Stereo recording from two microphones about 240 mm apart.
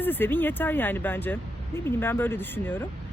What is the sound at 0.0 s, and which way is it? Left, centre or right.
Speech, centre.